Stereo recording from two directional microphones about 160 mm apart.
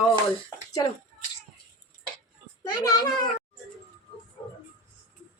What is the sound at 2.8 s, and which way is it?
Speech, 25° left (ahead or behind).